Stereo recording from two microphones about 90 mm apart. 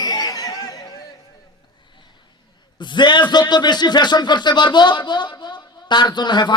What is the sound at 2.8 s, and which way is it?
Speech, 60° left (ahead or behind).